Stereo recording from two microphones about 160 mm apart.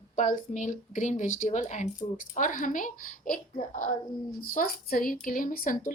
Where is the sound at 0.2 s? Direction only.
55° left (ahead or behind).